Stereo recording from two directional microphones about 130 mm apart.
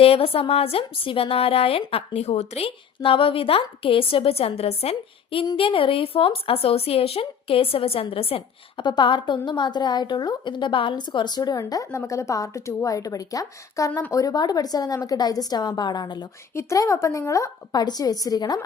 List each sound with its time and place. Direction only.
0.0 s a woman's voice: 45° left (ahead or behind); by 18.6 s 30° left (ahead or behind)